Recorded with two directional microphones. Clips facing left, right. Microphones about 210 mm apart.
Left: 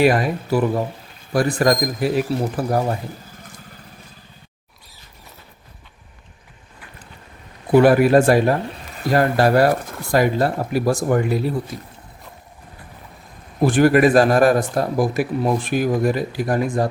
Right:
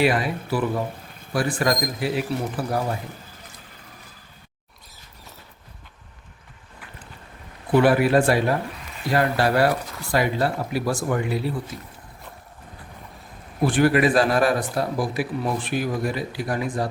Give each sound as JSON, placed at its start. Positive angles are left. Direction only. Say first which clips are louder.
{"t": 0.0, "sound": "speech", "louder": "left 5 dB", "side_deg": 45}
{"t": 7.8, "sound": "speech", "louder": "left 5 dB", "side_deg": 45}
{"t": 13.7, "sound": "speech", "louder": "left 5 dB", "side_deg": 45}